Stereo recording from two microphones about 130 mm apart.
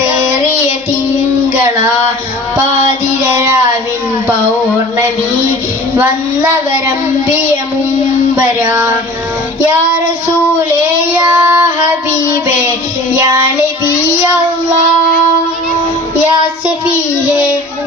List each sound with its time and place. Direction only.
6.0 s child singing: 15° right (ahead or behind)
8.4 s child singing: 15° right (ahead or behind)
10.8 s child singing: 15° right (ahead or behind)